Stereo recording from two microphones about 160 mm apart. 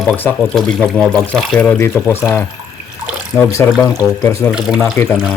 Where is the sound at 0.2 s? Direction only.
10° left (ahead or behind).